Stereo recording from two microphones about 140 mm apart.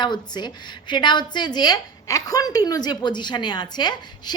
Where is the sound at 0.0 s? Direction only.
30° left (ahead or behind).